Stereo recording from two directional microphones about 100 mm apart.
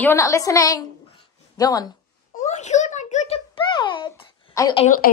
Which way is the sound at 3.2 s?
90° left.